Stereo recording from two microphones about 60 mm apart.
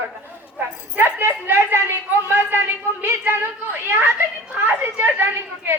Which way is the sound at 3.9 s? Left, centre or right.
Right.